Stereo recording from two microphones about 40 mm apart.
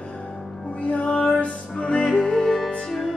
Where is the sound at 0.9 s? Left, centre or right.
Left.